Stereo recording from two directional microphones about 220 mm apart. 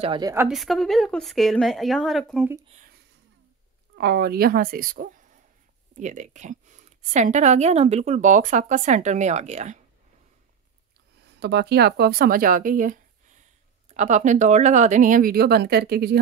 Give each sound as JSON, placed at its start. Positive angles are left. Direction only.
{"t": 0.0, "sound": "a woman's voice", "side_deg": -20}
{"t": 0.5, "sound": "a woman's voice", "side_deg": 0}
{"t": 2.7, "sound": "a sound", "side_deg": -35}
{"t": 3.9, "sound": "a woman's voice", "side_deg": -45}
{"t": 11.2, "sound": "a woman's voice", "side_deg": -50}